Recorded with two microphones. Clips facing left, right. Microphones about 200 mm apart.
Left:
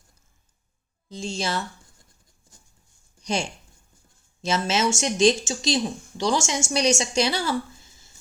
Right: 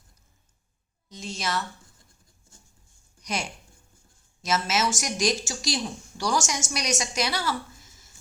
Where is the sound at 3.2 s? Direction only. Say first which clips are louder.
Left 5 dB; 30° left (ahead or behind).